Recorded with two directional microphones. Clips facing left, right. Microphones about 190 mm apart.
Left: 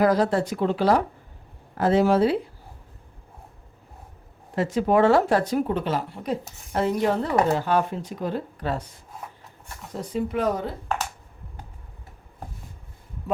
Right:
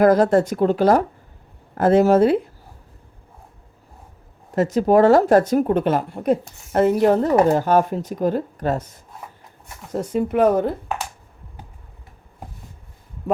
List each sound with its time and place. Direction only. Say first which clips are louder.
0.0 s speech: right 6 dB; 50° right (ahead or behind)
4.5 s speech: right 5 dB; 45° right (ahead or behind)